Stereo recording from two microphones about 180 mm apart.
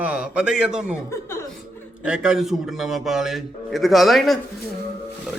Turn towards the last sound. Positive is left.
turn(degrees=0)  # may be behind; listen again after turning